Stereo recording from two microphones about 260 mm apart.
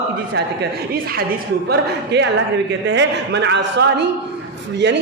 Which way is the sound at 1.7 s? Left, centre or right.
Right.